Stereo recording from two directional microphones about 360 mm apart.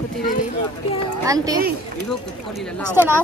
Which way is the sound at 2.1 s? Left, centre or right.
Centre.